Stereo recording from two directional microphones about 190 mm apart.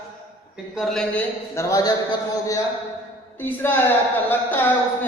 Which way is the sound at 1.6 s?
15° left (ahead or behind).